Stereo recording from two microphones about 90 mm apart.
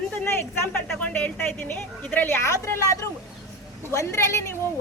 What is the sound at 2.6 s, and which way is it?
A woman's voice, 35° left (ahead or behind).